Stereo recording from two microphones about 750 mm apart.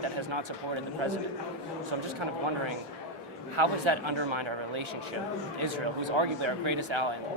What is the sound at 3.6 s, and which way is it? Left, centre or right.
Speech, right.